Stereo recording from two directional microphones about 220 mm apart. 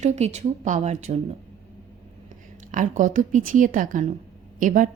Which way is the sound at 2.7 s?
35° right (ahead or behind).